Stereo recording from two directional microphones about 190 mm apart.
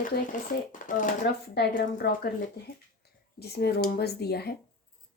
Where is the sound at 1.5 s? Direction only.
55° left (ahead or behind).